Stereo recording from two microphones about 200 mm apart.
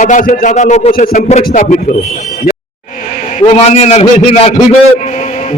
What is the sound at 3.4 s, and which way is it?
A man's voice, 35° left (ahead or behind).